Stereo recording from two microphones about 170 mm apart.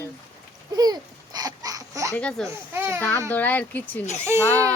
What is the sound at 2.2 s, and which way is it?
Speech, 5° left (ahead or behind).